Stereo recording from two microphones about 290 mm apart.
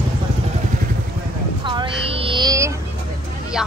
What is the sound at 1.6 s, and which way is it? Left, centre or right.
A woman's voice, centre.